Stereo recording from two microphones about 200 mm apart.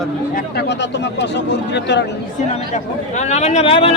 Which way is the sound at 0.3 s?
55° left (ahead or behind).